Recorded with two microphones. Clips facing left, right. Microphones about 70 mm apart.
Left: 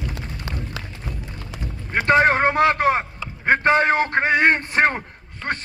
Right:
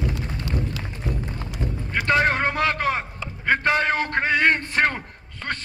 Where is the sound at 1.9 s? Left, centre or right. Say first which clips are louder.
Left 4 dB; left.